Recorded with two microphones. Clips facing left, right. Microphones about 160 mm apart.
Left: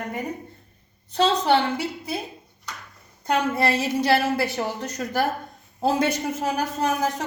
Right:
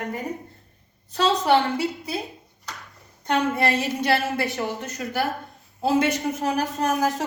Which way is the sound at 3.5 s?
35° left (ahead or behind).